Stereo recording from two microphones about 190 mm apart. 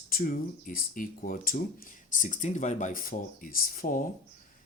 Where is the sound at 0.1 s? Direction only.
50° left (ahead or behind).